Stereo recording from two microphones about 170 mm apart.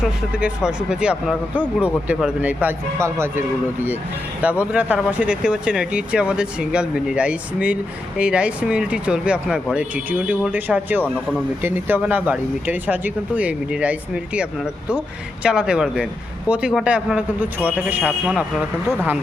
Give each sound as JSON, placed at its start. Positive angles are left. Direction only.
{"t": 0.0, "sound": "speech", "side_deg": -5}